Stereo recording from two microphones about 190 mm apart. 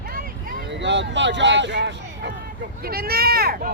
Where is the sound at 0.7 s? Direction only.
70° right (ahead or behind).